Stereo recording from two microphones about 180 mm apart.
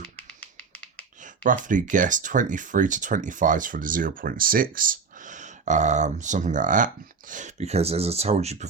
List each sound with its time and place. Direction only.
0.2 s finger snapping: 10° left (ahead or behind)
1.2 s speech: 45° right (ahead or behind)